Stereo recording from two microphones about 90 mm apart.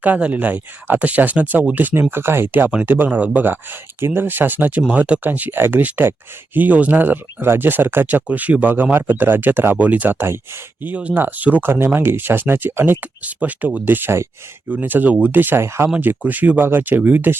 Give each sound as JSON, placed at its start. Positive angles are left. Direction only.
{"t": 0.0, "sound": "speech", "side_deg": -15}
{"t": 16.0, "sound": "speech", "side_deg": -20}